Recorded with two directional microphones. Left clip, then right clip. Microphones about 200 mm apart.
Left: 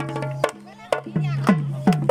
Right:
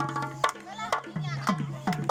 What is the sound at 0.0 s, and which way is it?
Music, 45° left (ahead or behind).